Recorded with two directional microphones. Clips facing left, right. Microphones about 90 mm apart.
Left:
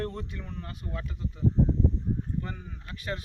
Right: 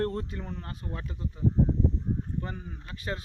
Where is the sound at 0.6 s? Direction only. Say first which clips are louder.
Even; 30° right (ahead or behind).